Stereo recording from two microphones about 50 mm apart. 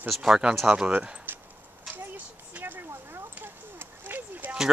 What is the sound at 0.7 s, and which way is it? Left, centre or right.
Speech, right.